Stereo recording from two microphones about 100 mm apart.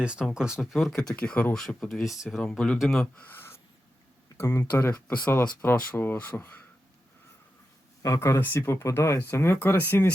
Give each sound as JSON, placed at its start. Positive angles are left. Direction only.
{"t": 0.0, "sound": "speech", "side_deg": -10}
{"t": 3.0, "sound": "speech", "side_deg": 20}
{"t": 4.9, "sound": "speech", "side_deg": 15}
{"t": 8.0, "sound": "speech", "side_deg": 30}
{"t": 8.4, "sound": "speech", "side_deg": 20}